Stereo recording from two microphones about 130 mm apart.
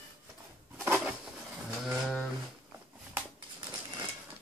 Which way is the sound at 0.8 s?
15° right (ahead or behind).